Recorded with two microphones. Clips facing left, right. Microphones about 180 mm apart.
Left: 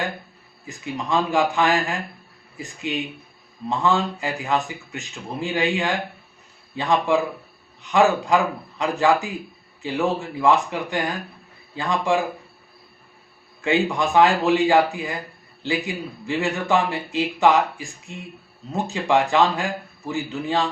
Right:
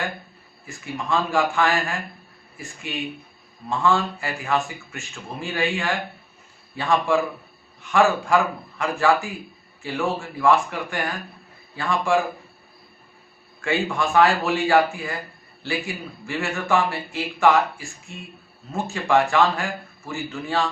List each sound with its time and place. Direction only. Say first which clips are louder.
0.6 s a man's voice: left 2 dB; 20° left (ahead or behind)
13.6 s a man's voice: left 3 dB; 20° left (ahead or behind)